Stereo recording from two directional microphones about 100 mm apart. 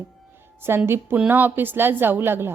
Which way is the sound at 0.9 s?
25° right (ahead or behind).